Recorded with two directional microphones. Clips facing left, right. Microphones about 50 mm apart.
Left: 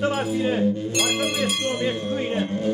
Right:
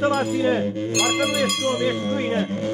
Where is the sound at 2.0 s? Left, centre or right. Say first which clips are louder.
Right 2 dB; right.